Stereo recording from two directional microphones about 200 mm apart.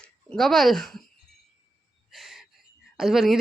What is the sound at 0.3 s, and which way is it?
Speech, centre (ahead or behind).